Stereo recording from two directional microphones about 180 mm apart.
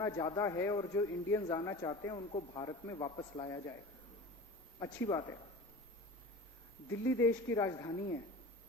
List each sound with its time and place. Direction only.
0.0 s speech: 20° left (ahead or behind)
4.8 s speech: 25° left (ahead or behind)
7.0 s speech: 15° left (ahead or behind)